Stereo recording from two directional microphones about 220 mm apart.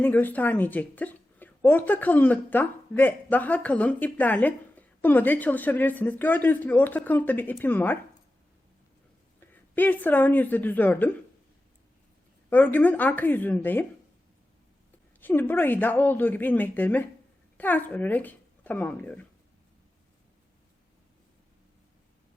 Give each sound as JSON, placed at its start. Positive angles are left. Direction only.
{"t": 0.0, "sound": "a woman's voice", "side_deg": 10}
{"t": 9.5, "sound": "a woman's voice", "side_deg": 10}
{"t": 12.5, "sound": "a woman's voice", "side_deg": 10}
{"t": 15.2, "sound": "a woman's voice", "side_deg": 10}